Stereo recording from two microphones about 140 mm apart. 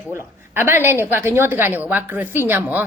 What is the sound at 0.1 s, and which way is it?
A woman's voice, 15° right (ahead or behind).